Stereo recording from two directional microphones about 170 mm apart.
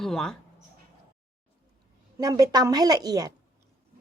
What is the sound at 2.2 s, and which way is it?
A woman's voice, 20° right (ahead or behind).